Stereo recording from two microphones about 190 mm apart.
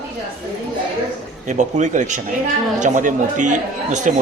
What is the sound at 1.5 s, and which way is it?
Speech, 40° right (ahead or behind).